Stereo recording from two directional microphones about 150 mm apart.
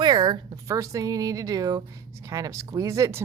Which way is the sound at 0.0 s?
30° right (ahead or behind).